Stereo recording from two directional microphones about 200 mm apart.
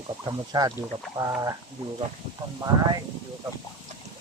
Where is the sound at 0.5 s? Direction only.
20° right (ahead or behind).